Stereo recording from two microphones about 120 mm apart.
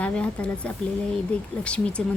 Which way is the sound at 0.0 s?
10° left (ahead or behind).